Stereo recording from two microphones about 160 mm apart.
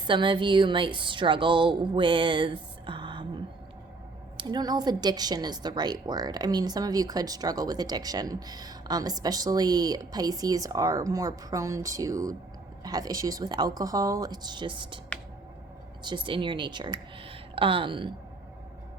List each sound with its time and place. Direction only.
0.1 s a woman's voice: 30° right (ahead or behind)
16.0 s speech: 30° right (ahead or behind)